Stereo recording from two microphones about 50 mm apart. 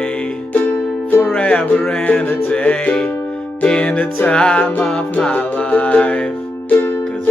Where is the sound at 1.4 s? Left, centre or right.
Left.